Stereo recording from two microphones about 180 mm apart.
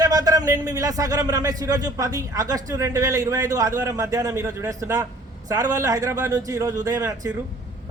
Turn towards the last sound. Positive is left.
turn(degrees=-20)  # may be behind; listen again after turning